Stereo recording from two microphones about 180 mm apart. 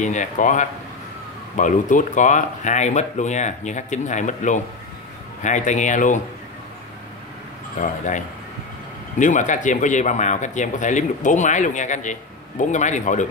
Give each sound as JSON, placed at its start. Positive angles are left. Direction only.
{"t": 0.0, "sound": "speech", "side_deg": 45}
{"t": 7.8, "sound": "speech", "side_deg": 45}
{"t": 9.2, "sound": "speech", "side_deg": 45}